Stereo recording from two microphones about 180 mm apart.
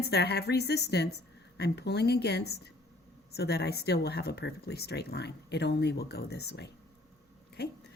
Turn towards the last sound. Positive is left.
turn(degrees=60)  # may be behind; listen again after turning